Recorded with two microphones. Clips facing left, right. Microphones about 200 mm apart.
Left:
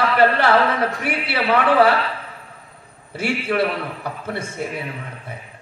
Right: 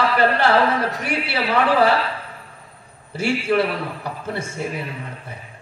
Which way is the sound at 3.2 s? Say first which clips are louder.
Right 2 dB; 55° left (ahead or behind).